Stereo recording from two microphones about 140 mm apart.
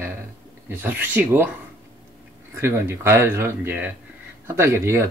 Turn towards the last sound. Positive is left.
turn(degrees=-15)  # may be behind; listen again after turning